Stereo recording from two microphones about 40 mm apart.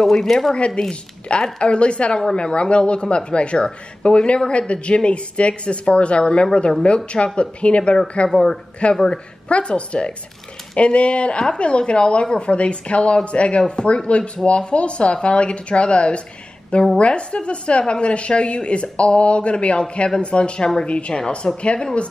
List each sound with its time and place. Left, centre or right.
0.0 s a woman's voice: centre
6.4 s a woman's voice: centre
8.3 s speech: centre
9.5 s a woman's voice: left